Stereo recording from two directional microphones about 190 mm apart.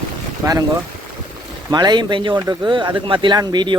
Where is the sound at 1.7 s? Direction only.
20° right (ahead or behind).